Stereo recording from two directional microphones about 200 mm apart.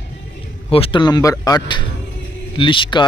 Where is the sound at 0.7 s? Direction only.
30° left (ahead or behind).